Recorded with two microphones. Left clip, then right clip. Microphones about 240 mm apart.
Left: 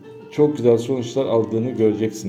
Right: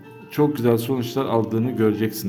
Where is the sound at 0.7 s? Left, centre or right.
Right.